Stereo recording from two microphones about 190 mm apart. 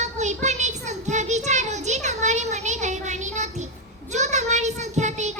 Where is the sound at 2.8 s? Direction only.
40° right (ahead or behind).